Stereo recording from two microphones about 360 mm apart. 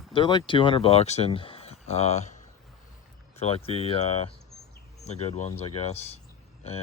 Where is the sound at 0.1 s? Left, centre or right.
Centre.